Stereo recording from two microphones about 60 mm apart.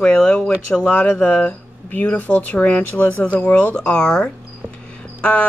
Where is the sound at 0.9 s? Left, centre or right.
Left.